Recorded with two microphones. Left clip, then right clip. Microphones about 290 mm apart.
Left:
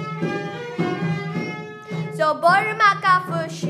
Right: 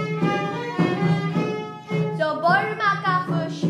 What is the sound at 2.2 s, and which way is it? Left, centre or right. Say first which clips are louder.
Music: left 4 dB; left.